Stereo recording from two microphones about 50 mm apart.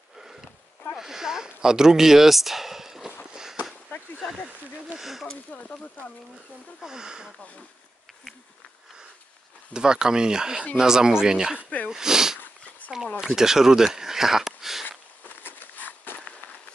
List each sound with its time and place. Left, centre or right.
0.9 s speech: centre
4.9 s speech: centre
5.3 s speech: left
6.8 s speech: centre
9.8 s speech: centre
12.8 s a sound: left
13.2 s speech: centre
14.9 s a sound: left